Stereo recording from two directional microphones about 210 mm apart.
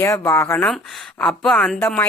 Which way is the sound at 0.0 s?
10° left (ahead or behind).